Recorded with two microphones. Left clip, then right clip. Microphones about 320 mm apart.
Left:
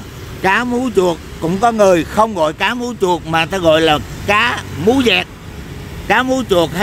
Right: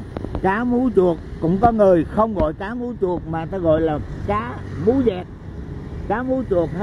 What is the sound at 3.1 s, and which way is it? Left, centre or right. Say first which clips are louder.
Speech: left 10 dB; left.